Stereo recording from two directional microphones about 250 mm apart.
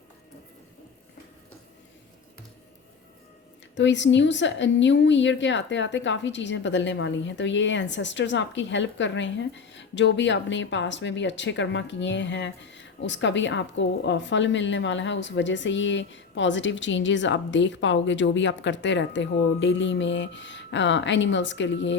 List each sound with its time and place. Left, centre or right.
3.8 s a woman's voice: left